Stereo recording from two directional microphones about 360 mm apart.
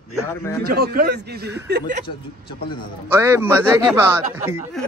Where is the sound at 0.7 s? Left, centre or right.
Right.